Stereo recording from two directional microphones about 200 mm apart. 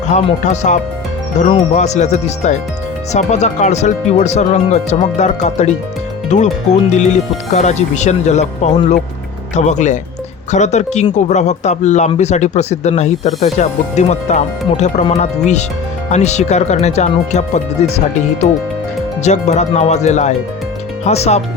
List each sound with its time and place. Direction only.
0.1 s speech: 35° left (ahead or behind)
19.2 s speech: 35° left (ahead or behind)